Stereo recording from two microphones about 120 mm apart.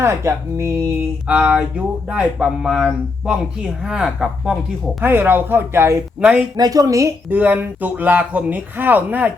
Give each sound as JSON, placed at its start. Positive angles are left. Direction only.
{"t": 0.0, "sound": "speech", "side_deg": -25}
{"t": 1.3, "sound": "speech", "side_deg": -10}
{"t": 4.9, "sound": "speech", "side_deg": -15}
{"t": 6.1, "sound": "speech", "side_deg": -10}
{"t": 6.6, "sound": "speech", "side_deg": -30}
{"t": 7.3, "sound": "speech", "side_deg": -15}